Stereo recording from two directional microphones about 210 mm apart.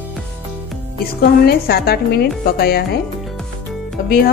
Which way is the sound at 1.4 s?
50° left (ahead or behind).